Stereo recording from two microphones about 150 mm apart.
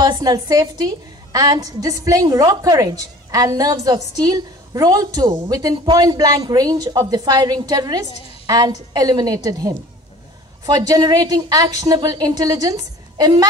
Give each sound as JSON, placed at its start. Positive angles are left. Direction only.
{"t": 0.0, "sound": "a woman's voice", "side_deg": -25}